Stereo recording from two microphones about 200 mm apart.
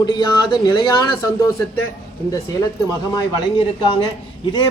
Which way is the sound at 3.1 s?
25° left (ahead or behind).